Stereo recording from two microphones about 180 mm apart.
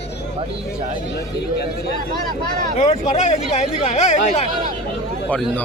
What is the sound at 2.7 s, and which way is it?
Speech, 35° left (ahead or behind).